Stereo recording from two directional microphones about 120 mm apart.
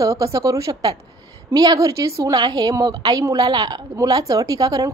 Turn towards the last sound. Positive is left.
turn(degrees=-30)  # may be behind; listen again after turning